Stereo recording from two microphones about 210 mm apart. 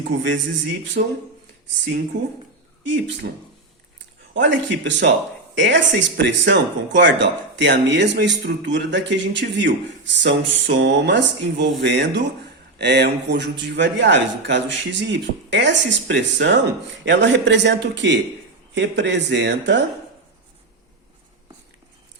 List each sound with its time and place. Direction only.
1.0 s speech: 45° right (ahead or behind)
2.1 s speech: 60° right (ahead or behind)
4.4 s speech: 60° right (ahead or behind)